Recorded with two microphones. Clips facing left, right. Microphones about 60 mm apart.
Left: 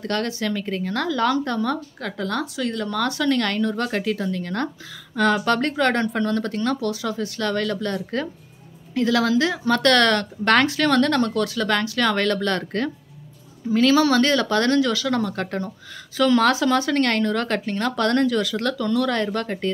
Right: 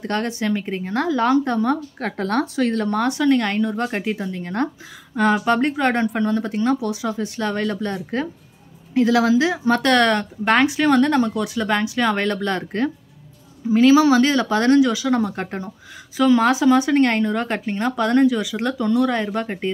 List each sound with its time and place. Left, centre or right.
0.0 s speech: right
2.0 s speech: right
3.0 s speech: right